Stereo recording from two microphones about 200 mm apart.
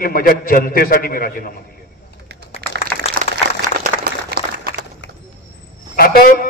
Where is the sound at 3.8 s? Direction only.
45° right (ahead or behind).